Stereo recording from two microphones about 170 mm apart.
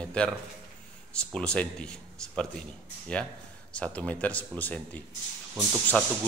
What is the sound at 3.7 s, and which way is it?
Speech, 5° left (ahead or behind).